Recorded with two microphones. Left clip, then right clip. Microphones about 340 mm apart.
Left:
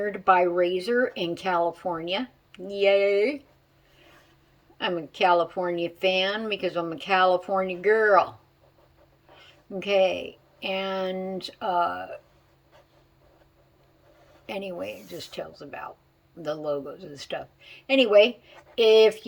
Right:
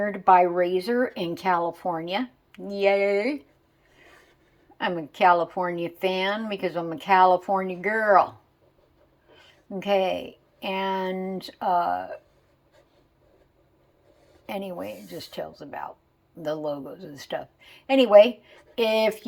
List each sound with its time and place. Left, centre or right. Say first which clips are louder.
0.3 s speech: right 2 dB; centre
4.8 s speech: right 3 dB; centre
9.8 s speech: left 1 dB; centre
14.4 s speech: even; centre